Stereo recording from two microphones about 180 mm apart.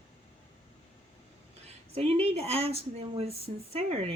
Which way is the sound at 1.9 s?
35° right (ahead or behind).